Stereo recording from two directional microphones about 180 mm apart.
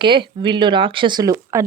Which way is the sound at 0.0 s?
25° right (ahead or behind).